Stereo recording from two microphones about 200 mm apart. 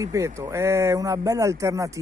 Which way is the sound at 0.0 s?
15° right (ahead or behind).